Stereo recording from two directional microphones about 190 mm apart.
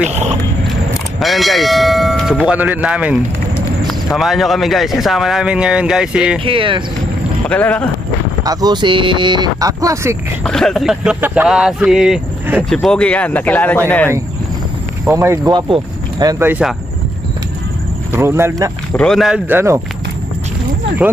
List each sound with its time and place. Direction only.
0.1 s a sound: 35° right (ahead or behind)
1.2 s a man's voice: centre (ahead or behind)
6.4 s speech: 25° right (ahead or behind)
7.4 s speech: 5° left (ahead or behind)
8.5 s speech: 20° right (ahead or behind)
10.4 s a man's voice: 5° left (ahead or behind)
15.0 s speech: 15° right (ahead or behind)
18.1 s speech: 15° right (ahead or behind)
18.9 s a man's voice: centre (ahead or behind)